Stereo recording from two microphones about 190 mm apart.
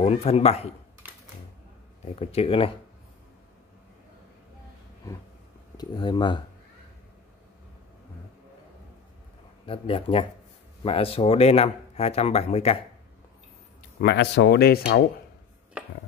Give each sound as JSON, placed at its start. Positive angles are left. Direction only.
{"t": 0.0, "sound": "speech", "side_deg": 35}
{"t": 1.0, "sound": "a sound", "side_deg": -10}
{"t": 2.1, "sound": "speech", "side_deg": 30}
{"t": 5.8, "sound": "speech", "side_deg": 20}
{"t": 9.7, "sound": "speech", "side_deg": 30}
{"t": 14.0, "sound": "speech", "side_deg": 65}